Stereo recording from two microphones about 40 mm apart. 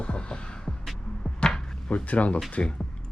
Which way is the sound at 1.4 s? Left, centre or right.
Centre.